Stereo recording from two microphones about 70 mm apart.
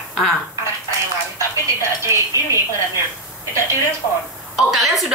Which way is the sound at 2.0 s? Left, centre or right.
Right.